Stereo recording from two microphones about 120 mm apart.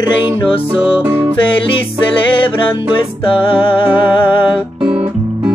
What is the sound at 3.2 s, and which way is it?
Music, 45° left (ahead or behind).